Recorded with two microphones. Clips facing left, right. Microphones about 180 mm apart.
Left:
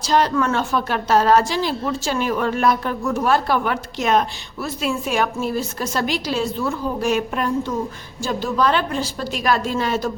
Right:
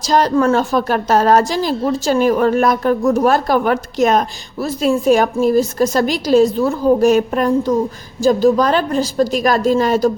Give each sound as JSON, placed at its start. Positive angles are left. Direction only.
{"t": 0.1, "sound": "a woman's voice", "side_deg": -40}